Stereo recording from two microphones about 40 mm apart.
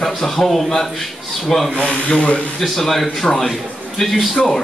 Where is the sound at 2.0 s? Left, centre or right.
Left.